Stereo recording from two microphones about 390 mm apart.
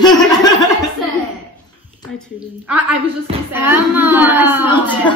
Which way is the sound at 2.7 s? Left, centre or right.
Right.